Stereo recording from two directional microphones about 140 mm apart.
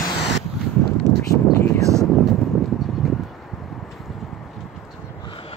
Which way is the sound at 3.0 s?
Centre (ahead or behind).